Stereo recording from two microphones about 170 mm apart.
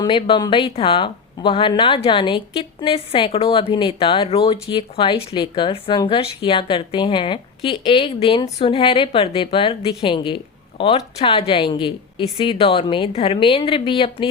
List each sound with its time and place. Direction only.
0.0 s a woman's voice: 30° left (ahead or behind)